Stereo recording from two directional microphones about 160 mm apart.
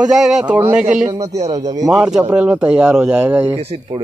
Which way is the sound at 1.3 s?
45° right (ahead or behind).